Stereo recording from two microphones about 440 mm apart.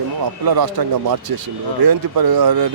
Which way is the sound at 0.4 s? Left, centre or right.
Right.